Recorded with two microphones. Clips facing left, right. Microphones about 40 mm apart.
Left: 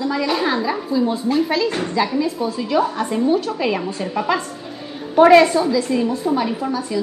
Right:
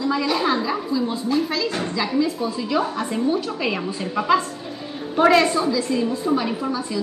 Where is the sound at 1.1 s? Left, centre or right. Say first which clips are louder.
Left 3 dB; left.